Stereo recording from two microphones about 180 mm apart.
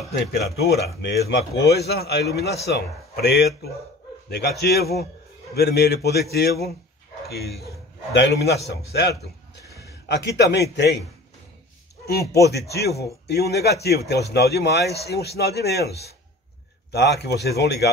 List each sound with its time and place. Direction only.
0.7 s a man's voice: 65° left (ahead or behind)
12.1 s speech: 65° left (ahead or behind)
16.9 s a man's voice: 70° left (ahead or behind)